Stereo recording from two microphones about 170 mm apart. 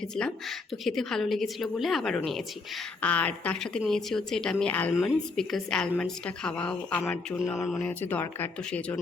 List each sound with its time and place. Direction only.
0.2 s a woman's voice: centre (ahead or behind)
7.8 s speech: 10° left (ahead or behind)